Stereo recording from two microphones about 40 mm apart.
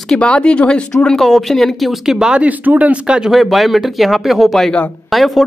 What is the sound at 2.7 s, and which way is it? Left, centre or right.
Speech, right.